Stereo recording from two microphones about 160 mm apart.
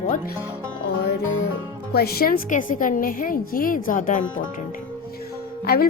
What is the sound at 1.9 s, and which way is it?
Speech, 75° left (ahead or behind).